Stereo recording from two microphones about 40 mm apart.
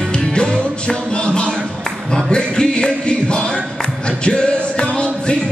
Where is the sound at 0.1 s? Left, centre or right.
Left.